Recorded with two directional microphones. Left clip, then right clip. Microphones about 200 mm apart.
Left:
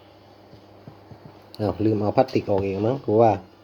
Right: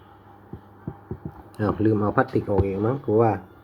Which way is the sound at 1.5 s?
15° right (ahead or behind).